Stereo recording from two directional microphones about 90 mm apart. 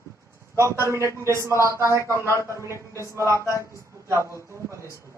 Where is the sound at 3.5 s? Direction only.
35° left (ahead or behind).